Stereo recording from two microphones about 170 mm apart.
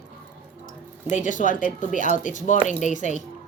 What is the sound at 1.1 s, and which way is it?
A woman's voice, 45° left (ahead or behind).